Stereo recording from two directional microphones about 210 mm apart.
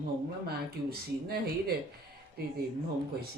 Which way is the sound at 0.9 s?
45° right (ahead or behind).